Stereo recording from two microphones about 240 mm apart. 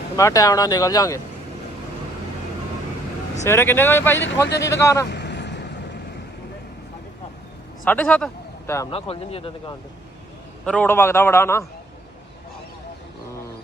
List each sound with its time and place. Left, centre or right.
0.2 s speech: centre
3.4 s speech: centre
4.2 s speech: left
4.7 s speech: centre
5.0 s vehicle: left
7.9 s speech: centre
8.9 s speech: left
10.7 s speech: centre